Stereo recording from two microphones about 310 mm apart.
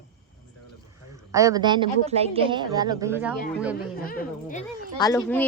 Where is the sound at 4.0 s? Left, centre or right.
Left.